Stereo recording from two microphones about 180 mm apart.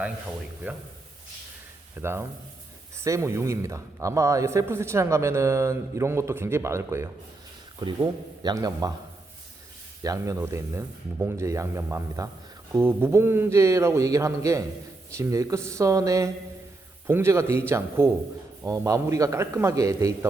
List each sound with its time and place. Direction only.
2.0 s speech: 15° right (ahead or behind)
8.4 s a man's voice: 20° right (ahead or behind)
10.0 s speech: 20° right (ahead or behind)